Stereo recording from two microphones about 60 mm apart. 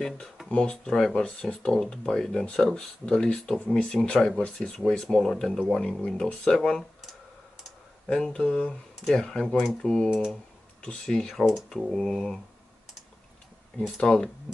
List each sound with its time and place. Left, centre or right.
0.5 s speech: centre
5.0 s speech: centre
8.1 s speech: centre
13.7 s speech: centre